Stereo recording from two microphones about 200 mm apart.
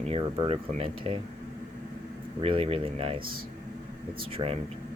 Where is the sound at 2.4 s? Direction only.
30° right (ahead or behind).